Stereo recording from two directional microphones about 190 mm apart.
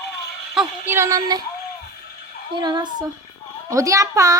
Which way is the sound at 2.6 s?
25° right (ahead or behind).